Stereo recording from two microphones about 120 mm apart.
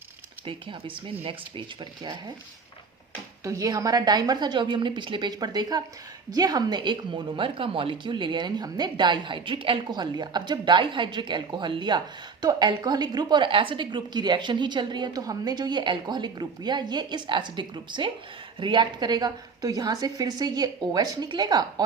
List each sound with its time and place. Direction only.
0.4 s speech: 45° right (ahead or behind)
3.4 s speech: 30° right (ahead or behind)